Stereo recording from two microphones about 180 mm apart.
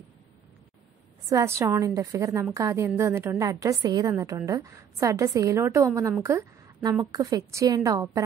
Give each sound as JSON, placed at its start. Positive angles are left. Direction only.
{"t": 1.3, "sound": "a woman's voice", "side_deg": -15}